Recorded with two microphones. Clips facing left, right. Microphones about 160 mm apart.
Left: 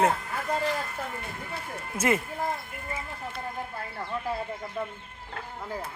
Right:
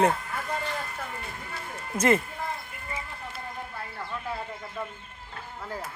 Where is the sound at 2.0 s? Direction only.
10° left (ahead or behind).